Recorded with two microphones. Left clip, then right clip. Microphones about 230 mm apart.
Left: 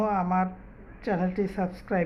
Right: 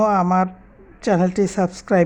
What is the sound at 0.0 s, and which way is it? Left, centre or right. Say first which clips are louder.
A woman's voice: right 9 dB; right.